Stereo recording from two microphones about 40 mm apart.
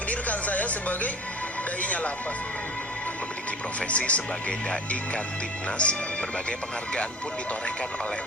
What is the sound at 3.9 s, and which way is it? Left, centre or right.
Speech, left.